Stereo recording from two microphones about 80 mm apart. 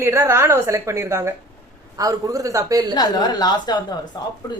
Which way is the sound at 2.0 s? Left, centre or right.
Right.